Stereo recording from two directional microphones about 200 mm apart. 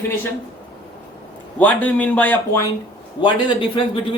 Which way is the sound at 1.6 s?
10° left (ahead or behind).